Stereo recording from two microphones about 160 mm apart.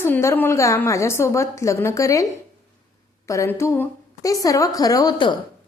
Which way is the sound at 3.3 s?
20° left (ahead or behind).